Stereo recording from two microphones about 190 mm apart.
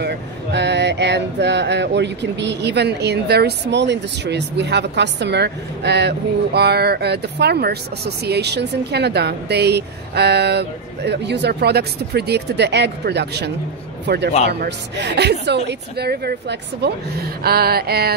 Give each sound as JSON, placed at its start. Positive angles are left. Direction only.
{"t": 0.0, "sound": "speech", "side_deg": -65}